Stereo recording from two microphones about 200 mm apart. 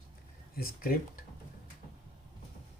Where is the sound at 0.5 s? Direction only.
45° left (ahead or behind).